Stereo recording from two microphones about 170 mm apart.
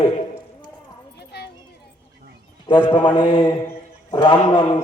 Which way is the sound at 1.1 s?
75° left (ahead or behind).